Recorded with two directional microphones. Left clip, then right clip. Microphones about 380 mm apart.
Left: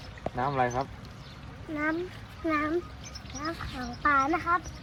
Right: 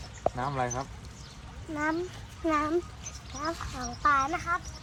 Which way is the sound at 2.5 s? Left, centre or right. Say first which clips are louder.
Right 1 dB; centre.